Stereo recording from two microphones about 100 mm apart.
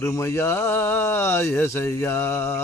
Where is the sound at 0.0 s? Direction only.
30° left (ahead or behind).